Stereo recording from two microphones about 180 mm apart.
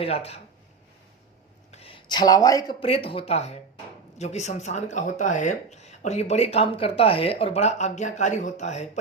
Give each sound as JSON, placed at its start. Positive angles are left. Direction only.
{"t": 0.0, "sound": "speech", "side_deg": 35}
{"t": 1.7, "sound": "speech", "side_deg": 30}